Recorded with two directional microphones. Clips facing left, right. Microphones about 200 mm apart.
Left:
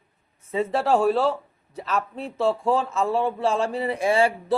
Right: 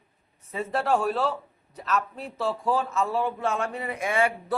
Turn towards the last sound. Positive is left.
turn(degrees=30)  # may be behind; listen again after turning